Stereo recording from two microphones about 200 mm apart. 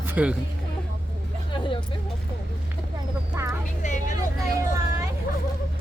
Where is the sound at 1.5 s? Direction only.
25° left (ahead or behind).